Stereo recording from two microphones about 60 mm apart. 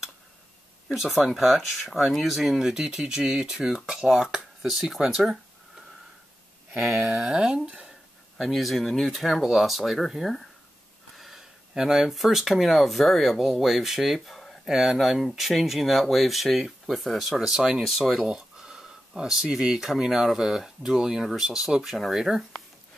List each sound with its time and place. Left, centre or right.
0.8 s speech: centre
4.6 s speech: centre
7.0 s speech: centre
8.4 s speech: centre
14.6 s speech: centre